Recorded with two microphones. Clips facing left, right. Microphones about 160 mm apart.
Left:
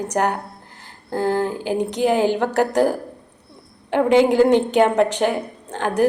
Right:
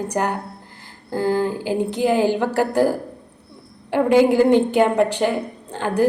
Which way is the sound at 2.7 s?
15° left (ahead or behind).